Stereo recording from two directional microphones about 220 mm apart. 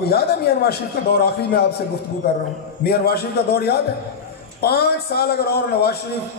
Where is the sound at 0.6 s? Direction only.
45° left (ahead or behind).